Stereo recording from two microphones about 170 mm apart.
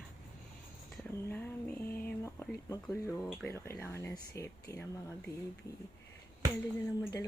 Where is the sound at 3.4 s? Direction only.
15° left (ahead or behind).